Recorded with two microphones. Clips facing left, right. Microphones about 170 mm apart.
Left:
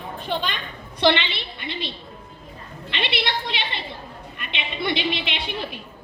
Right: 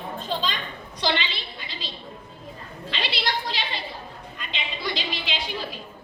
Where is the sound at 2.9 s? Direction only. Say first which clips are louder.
Left 2 dB; 60° left (ahead or behind).